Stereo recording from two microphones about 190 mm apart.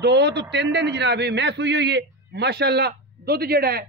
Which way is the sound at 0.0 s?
60° right (ahead or behind).